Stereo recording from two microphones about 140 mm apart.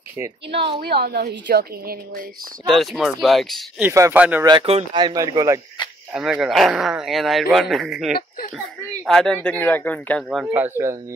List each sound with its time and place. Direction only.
0.7 s a woman's voice: 90° right
2.6 s a man's voice: centre (ahead or behind)
3.8 s speech: 15° right (ahead or behind)
4.5 s speech: 40° right (ahead or behind)
5.0 s speech: 25° right (ahead or behind)
6.1 s a man's voice: 5° right (ahead or behind)
10.3 s speech: 10° right (ahead or behind)